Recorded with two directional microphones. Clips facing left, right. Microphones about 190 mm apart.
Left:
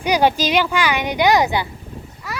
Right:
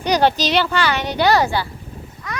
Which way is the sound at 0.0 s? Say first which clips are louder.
Even; 10° left (ahead or behind).